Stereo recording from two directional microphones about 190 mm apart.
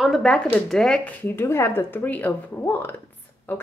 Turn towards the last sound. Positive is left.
turn(degrees=10)  # may be behind; listen again after turning